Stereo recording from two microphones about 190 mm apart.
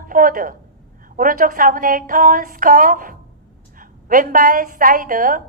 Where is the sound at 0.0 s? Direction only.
45° right (ahead or behind).